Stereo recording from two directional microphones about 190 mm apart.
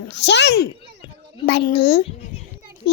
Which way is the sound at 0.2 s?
65° left (ahead or behind).